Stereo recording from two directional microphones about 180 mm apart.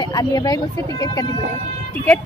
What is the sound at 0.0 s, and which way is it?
Speech, 20° left (ahead or behind).